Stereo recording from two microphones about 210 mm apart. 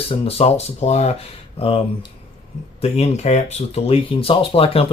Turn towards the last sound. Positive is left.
turn(degrees=25)  # may be behind; listen again after turning